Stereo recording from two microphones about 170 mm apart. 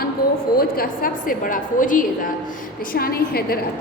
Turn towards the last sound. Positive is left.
turn(degrees=65)  # may be behind; listen again after turning